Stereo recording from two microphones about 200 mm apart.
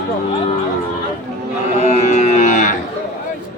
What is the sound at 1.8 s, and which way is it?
Cattle, 35° left (ahead or behind).